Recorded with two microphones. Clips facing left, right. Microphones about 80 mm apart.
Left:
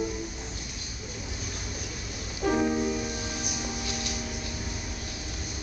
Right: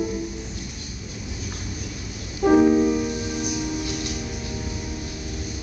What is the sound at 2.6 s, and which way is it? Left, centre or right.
Music, centre.